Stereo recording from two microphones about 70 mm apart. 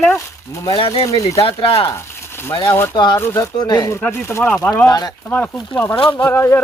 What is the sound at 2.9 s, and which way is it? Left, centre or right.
Speech, left.